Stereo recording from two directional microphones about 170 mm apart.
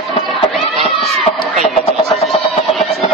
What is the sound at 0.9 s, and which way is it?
Cat, 35° left (ahead or behind).